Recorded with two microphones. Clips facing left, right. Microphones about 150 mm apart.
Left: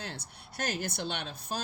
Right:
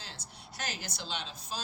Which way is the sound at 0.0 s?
55° left (ahead or behind).